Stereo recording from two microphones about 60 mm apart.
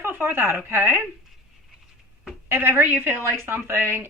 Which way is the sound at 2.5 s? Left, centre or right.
Right.